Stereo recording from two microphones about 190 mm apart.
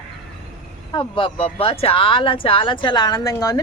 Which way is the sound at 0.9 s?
25° left (ahead or behind).